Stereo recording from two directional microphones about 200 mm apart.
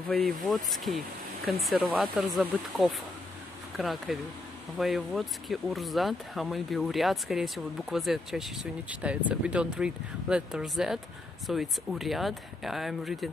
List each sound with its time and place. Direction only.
0.1 s speech: centre (ahead or behind)